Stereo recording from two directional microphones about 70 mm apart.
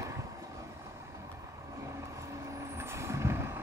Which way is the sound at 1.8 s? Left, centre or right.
Right.